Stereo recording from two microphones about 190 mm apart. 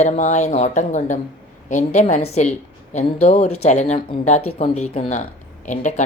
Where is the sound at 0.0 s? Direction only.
40° left (ahead or behind).